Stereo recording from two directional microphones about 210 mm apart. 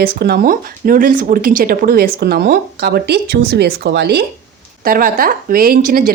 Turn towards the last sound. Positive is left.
turn(degrees=-40)  # may be behind; listen again after turning